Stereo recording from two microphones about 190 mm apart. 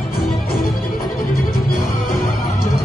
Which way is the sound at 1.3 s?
45° left (ahead or behind).